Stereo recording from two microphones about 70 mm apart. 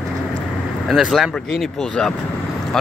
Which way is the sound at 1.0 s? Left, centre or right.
Centre.